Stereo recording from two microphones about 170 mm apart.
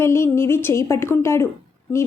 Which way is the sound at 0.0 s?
15° left (ahead or behind).